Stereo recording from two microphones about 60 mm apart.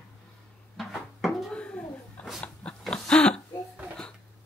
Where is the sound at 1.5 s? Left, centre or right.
Centre.